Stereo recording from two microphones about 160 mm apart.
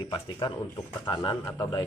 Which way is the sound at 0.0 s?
25° left (ahead or behind).